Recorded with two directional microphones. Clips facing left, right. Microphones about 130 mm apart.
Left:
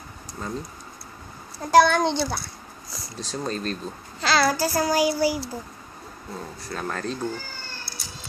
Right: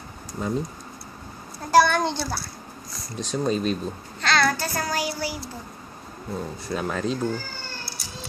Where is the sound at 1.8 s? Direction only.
15° left (ahead or behind).